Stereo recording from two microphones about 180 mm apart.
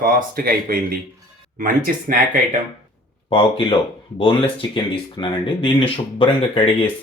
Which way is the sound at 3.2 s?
30° left (ahead or behind).